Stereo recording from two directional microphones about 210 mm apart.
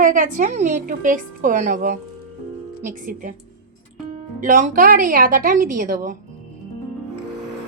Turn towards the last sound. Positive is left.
turn(degrees=-40)  # may be behind; listen again after turning